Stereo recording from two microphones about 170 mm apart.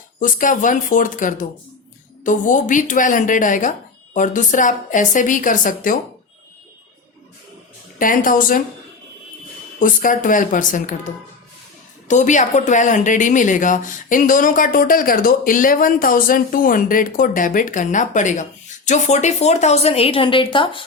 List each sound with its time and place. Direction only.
0.2 s speech: 50° left (ahead or behind)
7.9 s speech: 55° left (ahead or behind)
9.8 s speech: 50° left (ahead or behind)
12.0 s a woman's voice: 45° left (ahead or behind); by 20.8 s 30° left (ahead or behind)